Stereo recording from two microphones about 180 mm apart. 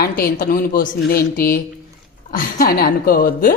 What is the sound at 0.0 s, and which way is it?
A woman's voice, 55° left (ahead or behind).